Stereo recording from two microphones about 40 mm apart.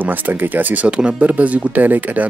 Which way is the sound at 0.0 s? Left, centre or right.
Right.